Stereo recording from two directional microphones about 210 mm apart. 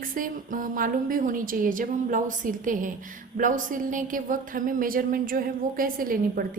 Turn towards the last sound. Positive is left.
turn(degrees=-40)  # may be behind; listen again after turning